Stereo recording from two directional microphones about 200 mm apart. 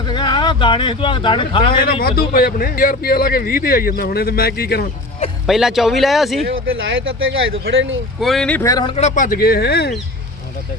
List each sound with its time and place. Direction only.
0.0 s speech: 20° left (ahead or behind)
1.8 s speech: 50° left (ahead or behind)
5.5 s speech: centre (ahead or behind)
6.8 s speech: 75° right (ahead or behind)
8.2 s speech: centre (ahead or behind); by 9.9 s 55° left (ahead or behind)